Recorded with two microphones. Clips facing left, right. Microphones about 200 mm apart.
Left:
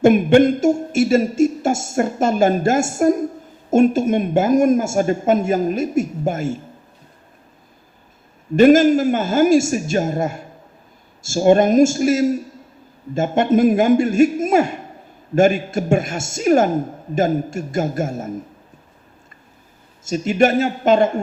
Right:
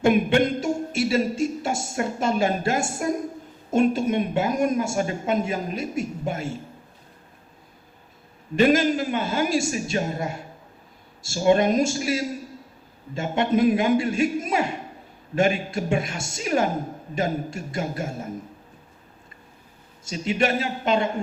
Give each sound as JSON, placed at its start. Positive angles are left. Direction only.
{"t": 0.0, "sound": "speech", "side_deg": 45}
{"t": 8.5, "sound": "speech", "side_deg": 45}
{"t": 20.1, "sound": "speech", "side_deg": 45}